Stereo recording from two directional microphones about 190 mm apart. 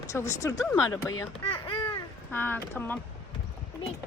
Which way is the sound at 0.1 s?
15° left (ahead or behind).